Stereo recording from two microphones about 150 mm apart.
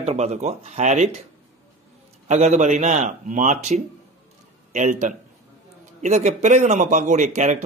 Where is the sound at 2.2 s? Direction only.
50° right (ahead or behind).